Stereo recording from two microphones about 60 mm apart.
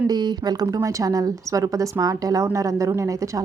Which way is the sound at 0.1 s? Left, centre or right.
Right.